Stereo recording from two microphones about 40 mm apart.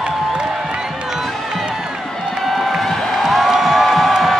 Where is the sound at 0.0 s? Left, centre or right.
Right.